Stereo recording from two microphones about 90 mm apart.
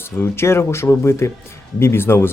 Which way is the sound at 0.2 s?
30° left (ahead or behind).